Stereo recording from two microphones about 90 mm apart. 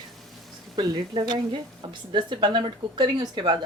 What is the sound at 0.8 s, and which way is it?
Speech, 55° right (ahead or behind).